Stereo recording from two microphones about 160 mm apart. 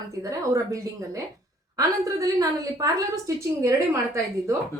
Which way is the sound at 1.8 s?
20° right (ahead or behind).